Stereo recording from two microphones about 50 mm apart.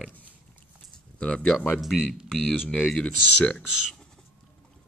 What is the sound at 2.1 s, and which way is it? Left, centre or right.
Speech, centre.